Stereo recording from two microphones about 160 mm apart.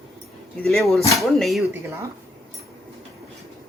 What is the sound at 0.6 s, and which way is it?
Speech, centre (ahead or behind).